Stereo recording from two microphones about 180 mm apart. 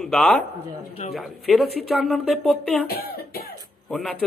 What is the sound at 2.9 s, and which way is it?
Cough, 60° left (ahead or behind).